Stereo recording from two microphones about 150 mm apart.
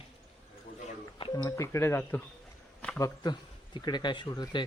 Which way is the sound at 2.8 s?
10° left (ahead or behind).